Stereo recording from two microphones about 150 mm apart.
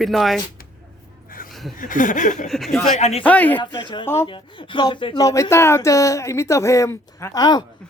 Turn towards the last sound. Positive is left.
turn(degrees=25)  # may be behind; listen again after turning